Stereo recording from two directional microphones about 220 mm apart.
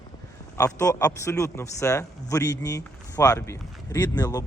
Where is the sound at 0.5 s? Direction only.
15° left (ahead or behind).